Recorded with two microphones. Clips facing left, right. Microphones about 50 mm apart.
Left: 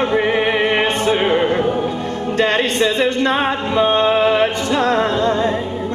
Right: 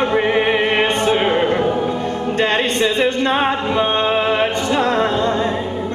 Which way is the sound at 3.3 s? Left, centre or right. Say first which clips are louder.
Right 1 dB; centre.